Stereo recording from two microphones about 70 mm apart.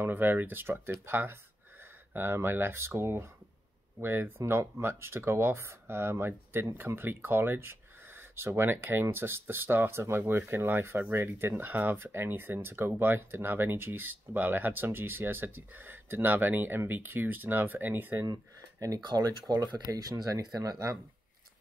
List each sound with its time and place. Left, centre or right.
0.0 s speech: right
18.2 s speech: right
19.5 s speech: right